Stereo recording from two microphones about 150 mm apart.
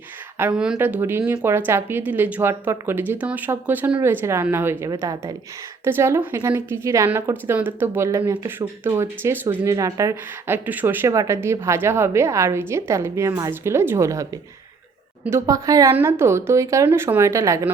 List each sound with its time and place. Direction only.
0.3 s a woman's voice: 10° right (ahead or behind)